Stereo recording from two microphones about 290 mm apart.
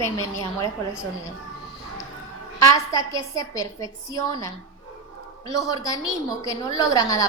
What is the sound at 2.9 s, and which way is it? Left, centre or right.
A woman's voice, centre.